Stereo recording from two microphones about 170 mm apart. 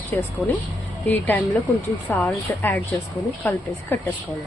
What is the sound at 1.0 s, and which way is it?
Speech, 10° left (ahead or behind).